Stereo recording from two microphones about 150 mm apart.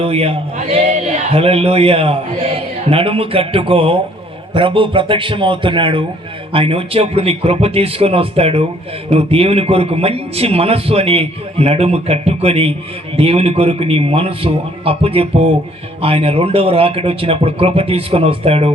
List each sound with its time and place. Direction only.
0.0 s speech: 40° right (ahead or behind)